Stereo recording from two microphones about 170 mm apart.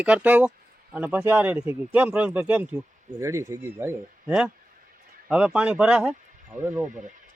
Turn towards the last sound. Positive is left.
turn(degrees=-10)  # may be behind; listen again after turning